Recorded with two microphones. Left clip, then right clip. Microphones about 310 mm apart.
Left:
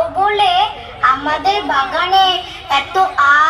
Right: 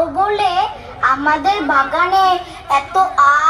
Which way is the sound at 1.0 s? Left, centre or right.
Right.